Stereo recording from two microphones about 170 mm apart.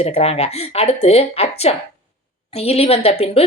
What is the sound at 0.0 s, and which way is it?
A woman's voice, 35° left (ahead or behind).